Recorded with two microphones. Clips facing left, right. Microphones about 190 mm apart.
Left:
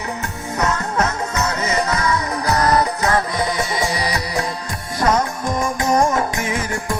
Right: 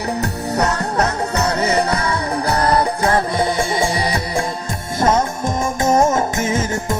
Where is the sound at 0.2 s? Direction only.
35° right (ahead or behind).